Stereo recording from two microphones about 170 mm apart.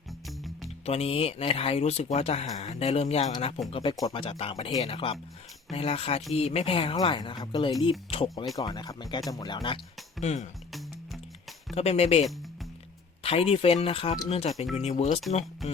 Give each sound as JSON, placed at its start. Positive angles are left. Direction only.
{"t": 0.3, "sound": "music", "side_deg": 0}
{"t": 0.9, "sound": "speech", "side_deg": 35}
{"t": 10.2, "sound": "speech", "side_deg": 40}
{"t": 10.7, "sound": "music", "side_deg": 0}
{"t": 11.7, "sound": "speech", "side_deg": 40}
{"t": 13.2, "sound": "speech", "side_deg": 35}